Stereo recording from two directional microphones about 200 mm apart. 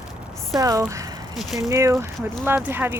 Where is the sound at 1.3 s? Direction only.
Centre (ahead or behind).